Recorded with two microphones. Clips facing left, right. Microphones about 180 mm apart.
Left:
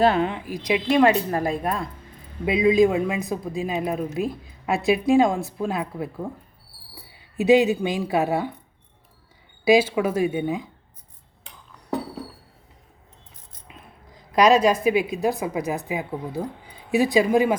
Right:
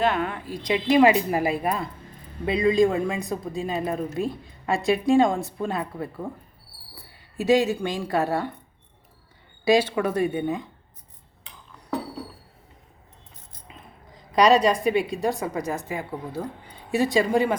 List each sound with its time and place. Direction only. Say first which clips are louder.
0.0 s speech: left 4 dB; 30° left (ahead or behind)
0.3 s speech: left 3 dB; 15° left (ahead or behind)
0.6 s a man's voice: even; centre (ahead or behind)
7.3 s speech: left 3 dB; 10° left (ahead or behind)
9.6 s a man's voice: left 2 dB; 5° left (ahead or behind)
13.7 s a woman's voice: even; centre (ahead or behind)